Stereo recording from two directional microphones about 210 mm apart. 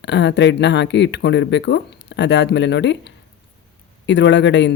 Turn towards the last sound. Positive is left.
turn(degrees=60)  # may be behind; listen again after turning